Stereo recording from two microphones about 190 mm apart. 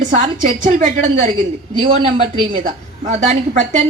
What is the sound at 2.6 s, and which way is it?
A woman's voice, 40° right (ahead or behind).